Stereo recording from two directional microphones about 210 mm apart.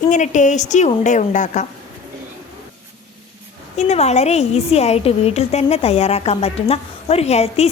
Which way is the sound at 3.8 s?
30° left (ahead or behind).